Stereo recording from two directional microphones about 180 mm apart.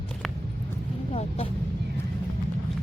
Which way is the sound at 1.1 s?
35° left (ahead or behind).